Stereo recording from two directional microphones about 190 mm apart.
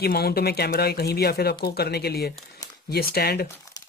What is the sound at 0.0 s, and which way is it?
Speech, 55° left (ahead or behind).